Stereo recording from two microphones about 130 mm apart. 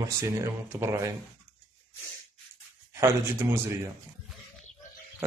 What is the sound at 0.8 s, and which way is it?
Speech, 20° right (ahead or behind).